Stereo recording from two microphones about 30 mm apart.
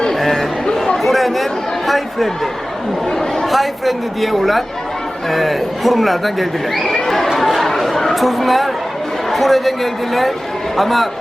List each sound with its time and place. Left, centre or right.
0.1 s a sound: centre
1.0 s chatter: centre
1.9 s speech: centre
3.1 s speech: centre
3.4 s speech: centre
7.3 s chatter: centre
7.9 s speech: centre